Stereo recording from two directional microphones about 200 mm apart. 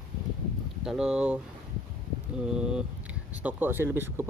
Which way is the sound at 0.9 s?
5° right (ahead or behind).